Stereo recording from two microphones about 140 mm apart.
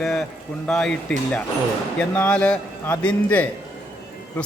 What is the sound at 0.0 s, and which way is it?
A man's voice, 5° left (ahead or behind).